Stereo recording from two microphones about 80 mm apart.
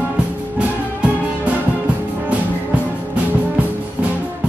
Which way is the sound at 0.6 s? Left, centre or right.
Centre.